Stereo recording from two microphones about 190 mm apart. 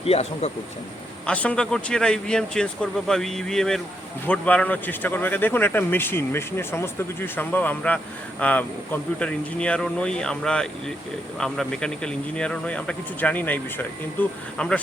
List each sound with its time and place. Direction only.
0.0 s speech: 35° left (ahead or behind)
1.3 s speech: 5° left (ahead or behind)